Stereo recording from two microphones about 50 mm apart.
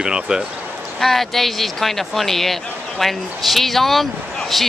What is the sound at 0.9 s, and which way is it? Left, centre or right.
Speech, centre.